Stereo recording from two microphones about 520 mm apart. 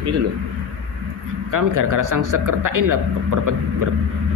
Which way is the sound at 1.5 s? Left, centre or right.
Right.